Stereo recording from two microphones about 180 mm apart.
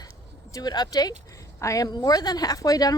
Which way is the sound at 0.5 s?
20° left (ahead or behind).